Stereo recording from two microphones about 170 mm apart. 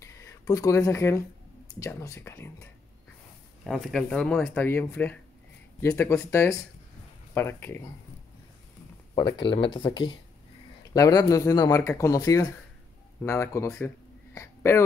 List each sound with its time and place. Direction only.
0.0 s speech: 15° left (ahead or behind)
3.6 s speech: centre (ahead or behind)
9.1 s speech: 30° left (ahead or behind)